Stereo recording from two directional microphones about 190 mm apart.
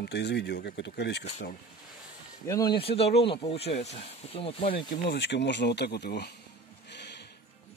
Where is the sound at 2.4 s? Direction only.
20° left (ahead or behind).